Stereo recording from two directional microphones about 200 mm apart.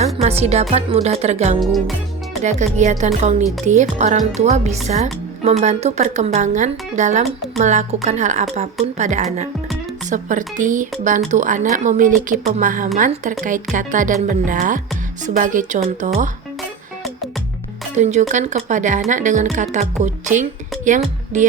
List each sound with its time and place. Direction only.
0.0 s speech: 30° right (ahead or behind)
1.5 s music: centre (ahead or behind)
2.4 s speech: 35° right (ahead or behind)
17.9 s speech: 35° right (ahead or behind)